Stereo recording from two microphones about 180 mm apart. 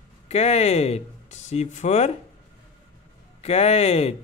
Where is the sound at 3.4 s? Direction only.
35° left (ahead or behind).